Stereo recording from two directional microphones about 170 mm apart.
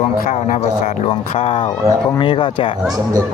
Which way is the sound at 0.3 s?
45° left (ahead or behind).